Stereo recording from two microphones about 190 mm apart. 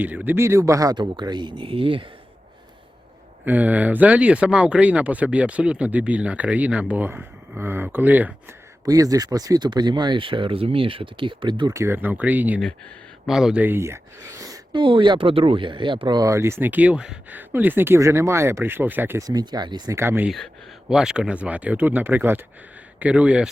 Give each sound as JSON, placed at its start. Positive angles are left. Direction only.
{"t": 0.0, "sound": "speech", "side_deg": -10}
{"t": 3.4, "sound": "speech", "side_deg": -10}